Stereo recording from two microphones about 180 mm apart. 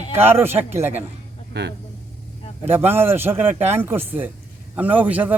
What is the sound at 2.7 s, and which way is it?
A man's voice, 10° right (ahead or behind).